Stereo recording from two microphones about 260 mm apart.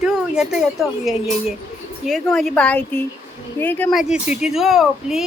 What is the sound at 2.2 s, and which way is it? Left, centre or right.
A woman's voice, centre.